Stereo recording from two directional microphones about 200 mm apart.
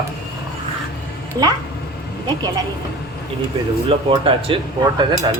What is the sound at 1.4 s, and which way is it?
Speech, 15° right (ahead or behind).